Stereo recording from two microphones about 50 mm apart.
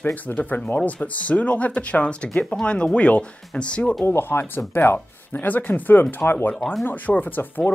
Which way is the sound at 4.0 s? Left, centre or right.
Left.